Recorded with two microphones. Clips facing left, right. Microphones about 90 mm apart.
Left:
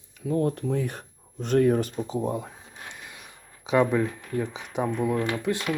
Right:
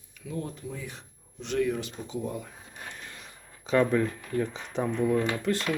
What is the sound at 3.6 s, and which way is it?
Speech, 15° left (ahead or behind).